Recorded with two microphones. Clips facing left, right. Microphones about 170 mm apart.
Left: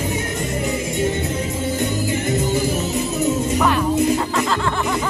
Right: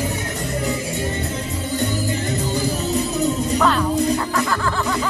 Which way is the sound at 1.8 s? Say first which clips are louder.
Even; 20° left (ahead or behind).